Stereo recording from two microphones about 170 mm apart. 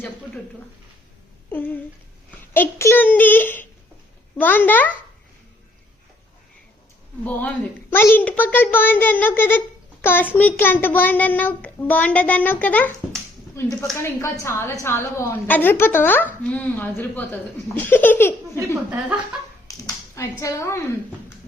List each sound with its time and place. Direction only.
1.5 s a woman's voice: 10° left (ahead or behind)
7.3 s a woman's voice: 10° left (ahead or behind)
18.9 s speech: 10° right (ahead or behind)
19.6 s a sound: 20° left (ahead or behind)
20.4 s a woman's voice: 15° left (ahead or behind)